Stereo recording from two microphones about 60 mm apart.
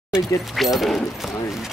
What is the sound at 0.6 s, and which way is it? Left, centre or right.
Speech, centre.